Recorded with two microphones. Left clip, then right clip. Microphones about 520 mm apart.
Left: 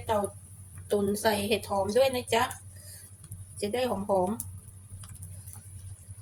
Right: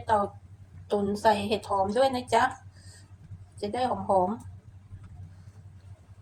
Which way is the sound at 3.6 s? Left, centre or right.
Left.